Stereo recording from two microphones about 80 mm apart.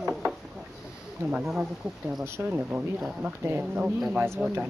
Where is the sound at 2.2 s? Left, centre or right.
Right.